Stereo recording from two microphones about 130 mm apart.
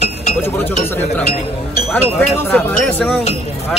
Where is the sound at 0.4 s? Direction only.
15° left (ahead or behind).